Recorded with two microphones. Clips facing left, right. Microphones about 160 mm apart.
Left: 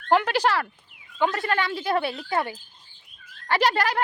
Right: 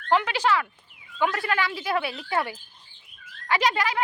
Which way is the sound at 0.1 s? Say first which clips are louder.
Left 2 dB; 45° left (ahead or behind).